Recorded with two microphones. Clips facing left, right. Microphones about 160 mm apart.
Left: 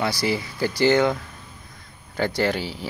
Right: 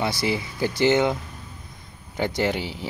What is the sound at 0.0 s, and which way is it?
Speech, 20° right (ahead or behind).